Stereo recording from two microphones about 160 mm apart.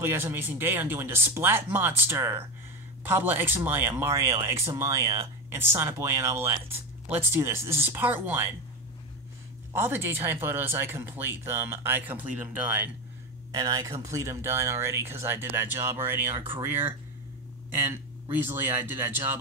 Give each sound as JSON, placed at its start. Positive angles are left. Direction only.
{"t": 0.0, "sound": "speech", "side_deg": -15}
{"t": 9.8, "sound": "speech", "side_deg": -15}
{"t": 13.5, "sound": "speech", "side_deg": -25}